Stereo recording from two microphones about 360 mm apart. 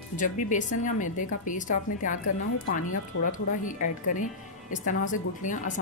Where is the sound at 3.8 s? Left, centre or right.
Left.